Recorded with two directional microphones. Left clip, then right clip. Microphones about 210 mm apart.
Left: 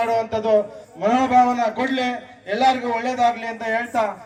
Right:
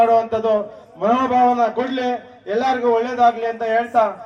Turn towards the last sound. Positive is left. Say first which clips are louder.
# right 5 dB
turn(degrees=-25)  # may be behind; listen again after turning